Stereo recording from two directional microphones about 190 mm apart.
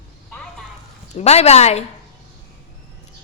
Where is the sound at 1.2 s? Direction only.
35° left (ahead or behind).